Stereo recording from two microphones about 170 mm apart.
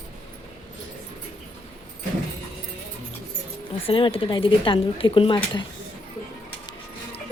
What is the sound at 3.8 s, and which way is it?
Speech, 30° left (ahead or behind).